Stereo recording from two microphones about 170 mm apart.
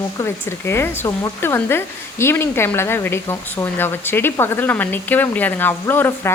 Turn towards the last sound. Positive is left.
turn(degrees=15)  # may be behind; listen again after turning